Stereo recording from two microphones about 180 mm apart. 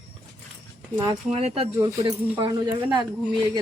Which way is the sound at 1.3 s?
35° right (ahead or behind).